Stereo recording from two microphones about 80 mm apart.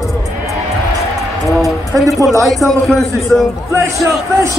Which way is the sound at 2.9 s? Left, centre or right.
Centre.